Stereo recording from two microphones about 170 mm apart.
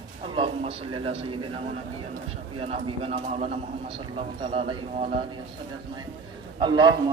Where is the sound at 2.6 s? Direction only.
35° right (ahead or behind).